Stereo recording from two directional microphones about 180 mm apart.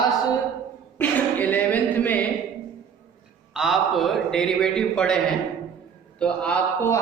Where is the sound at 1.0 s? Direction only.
10° left (ahead or behind).